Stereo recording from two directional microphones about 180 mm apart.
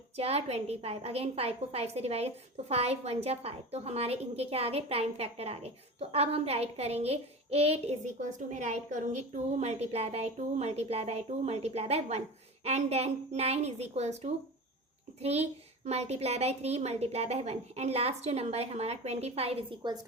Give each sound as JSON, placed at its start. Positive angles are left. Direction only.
{"t": 0.2, "sound": "a woman's voice", "side_deg": -35}